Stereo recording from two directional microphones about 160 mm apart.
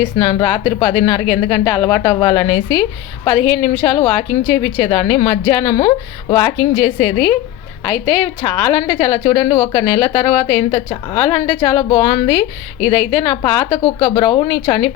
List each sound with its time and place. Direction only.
0.0 s a woman's voice: 30° left (ahead or behind)